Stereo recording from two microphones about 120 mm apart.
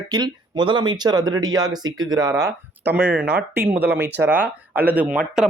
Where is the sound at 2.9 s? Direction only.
10° right (ahead or behind).